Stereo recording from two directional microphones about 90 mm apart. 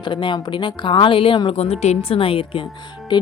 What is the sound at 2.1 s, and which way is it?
Speech, 90° left.